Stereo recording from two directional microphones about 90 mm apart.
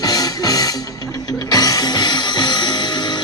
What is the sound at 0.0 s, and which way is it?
Music, 45° left (ahead or behind).